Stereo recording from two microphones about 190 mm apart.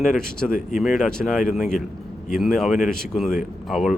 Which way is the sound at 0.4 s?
45° left (ahead or behind).